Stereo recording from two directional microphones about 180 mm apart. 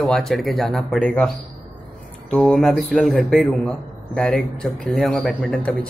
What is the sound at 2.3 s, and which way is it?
Speech, 5° left (ahead or behind).